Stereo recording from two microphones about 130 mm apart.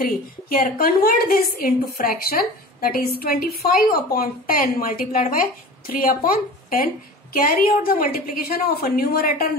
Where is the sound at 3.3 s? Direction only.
90° left.